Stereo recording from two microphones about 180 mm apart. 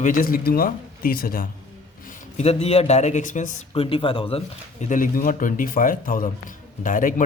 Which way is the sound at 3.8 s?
30° left (ahead or behind).